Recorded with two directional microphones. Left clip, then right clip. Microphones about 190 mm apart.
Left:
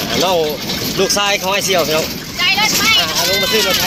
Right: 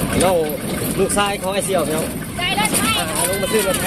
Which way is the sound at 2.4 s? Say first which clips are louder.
Left 6 dB; 15° right (ahead or behind).